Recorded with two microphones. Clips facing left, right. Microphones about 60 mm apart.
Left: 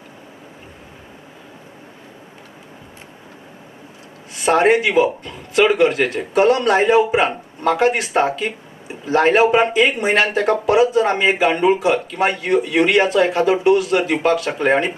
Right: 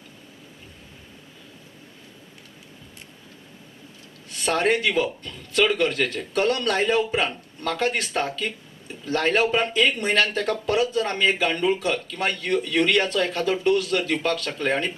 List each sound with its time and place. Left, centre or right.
4.4 s speech: centre